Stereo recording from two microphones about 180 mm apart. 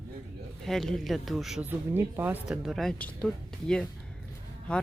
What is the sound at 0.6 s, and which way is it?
Speech, centre (ahead or behind).